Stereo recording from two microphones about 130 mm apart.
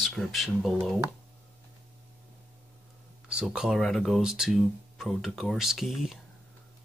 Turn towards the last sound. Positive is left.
turn(degrees=0)  # may be behind; listen again after turning